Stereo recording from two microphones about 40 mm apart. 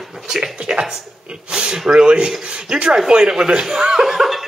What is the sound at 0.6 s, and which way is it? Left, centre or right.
Speech, right.